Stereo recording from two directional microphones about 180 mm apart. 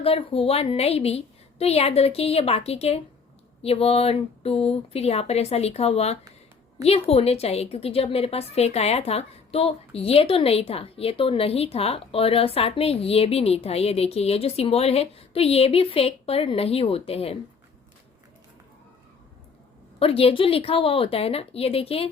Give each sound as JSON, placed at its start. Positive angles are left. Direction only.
{"t": 0.0, "sound": "a woman's voice", "side_deg": 30}
{"t": 20.0, "sound": "a woman's voice", "side_deg": 30}